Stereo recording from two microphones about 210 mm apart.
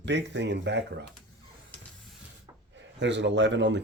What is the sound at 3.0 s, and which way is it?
Speech, 55° right (ahead or behind).